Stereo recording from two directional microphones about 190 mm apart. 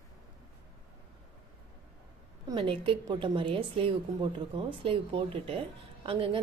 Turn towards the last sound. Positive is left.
turn(degrees=-30)  # may be behind; listen again after turning